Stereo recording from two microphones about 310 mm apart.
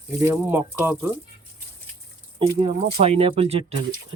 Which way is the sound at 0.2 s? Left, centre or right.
Centre.